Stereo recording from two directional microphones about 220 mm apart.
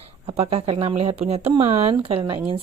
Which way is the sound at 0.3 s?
25° right (ahead or behind).